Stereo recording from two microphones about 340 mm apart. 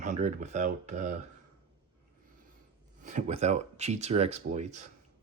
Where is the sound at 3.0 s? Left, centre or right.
Centre.